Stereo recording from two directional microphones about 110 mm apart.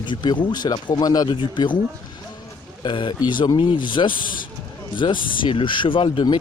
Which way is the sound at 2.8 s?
50° left (ahead or behind).